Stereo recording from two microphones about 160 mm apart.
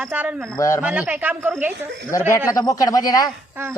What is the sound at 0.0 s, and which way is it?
Speech, 10° right (ahead or behind).